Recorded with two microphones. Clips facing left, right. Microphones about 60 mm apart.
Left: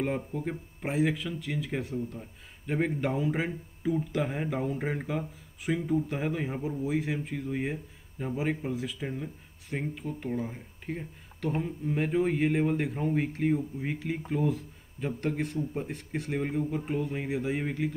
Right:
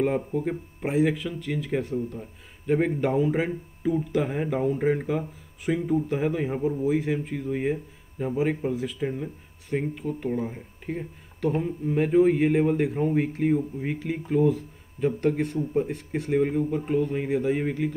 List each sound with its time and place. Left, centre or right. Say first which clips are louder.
0.0 s speech: right 6 dB; centre